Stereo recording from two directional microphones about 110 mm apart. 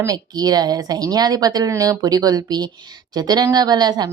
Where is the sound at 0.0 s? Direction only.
35° right (ahead or behind).